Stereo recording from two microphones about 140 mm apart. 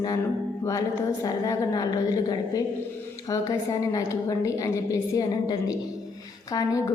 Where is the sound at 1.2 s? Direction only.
25° left (ahead or behind).